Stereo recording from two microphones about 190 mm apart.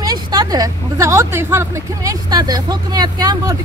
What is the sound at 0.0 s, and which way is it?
Speech, 20° right (ahead or behind).